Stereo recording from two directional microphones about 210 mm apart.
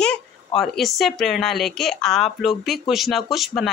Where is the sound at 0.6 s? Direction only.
Centre (ahead or behind).